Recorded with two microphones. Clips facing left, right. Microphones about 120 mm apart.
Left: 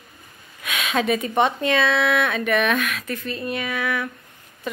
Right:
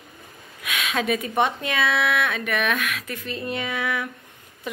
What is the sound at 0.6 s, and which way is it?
Speech, centre (ahead or behind).